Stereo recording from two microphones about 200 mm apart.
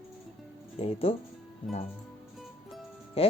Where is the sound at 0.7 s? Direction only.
30° left (ahead or behind).